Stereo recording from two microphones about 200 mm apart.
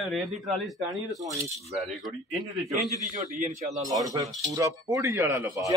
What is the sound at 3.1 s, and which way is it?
Speech, 40° right (ahead or behind).